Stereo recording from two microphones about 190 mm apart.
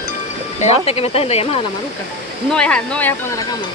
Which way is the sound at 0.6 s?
30° left (ahead or behind).